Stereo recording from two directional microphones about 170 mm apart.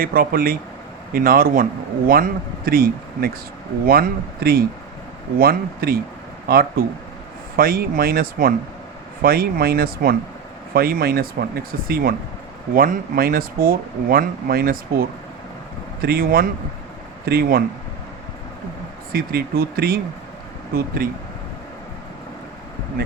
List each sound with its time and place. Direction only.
0.0 s speech: 60° right (ahead or behind)
16.0 s speech: 65° right (ahead or behind)
19.1 s speech: 65° right (ahead or behind)